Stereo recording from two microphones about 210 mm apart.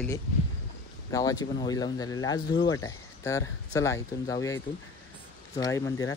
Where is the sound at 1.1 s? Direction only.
15° left (ahead or behind).